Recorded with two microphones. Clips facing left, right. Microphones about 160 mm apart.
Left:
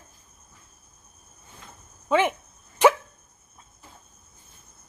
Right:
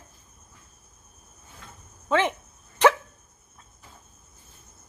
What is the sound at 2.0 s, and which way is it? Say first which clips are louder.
Speech: left 2 dB; 10° left (ahead or behind).